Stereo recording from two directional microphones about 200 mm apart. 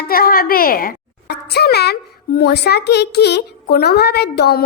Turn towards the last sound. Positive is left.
turn(degrees=50)  # may be behind; listen again after turning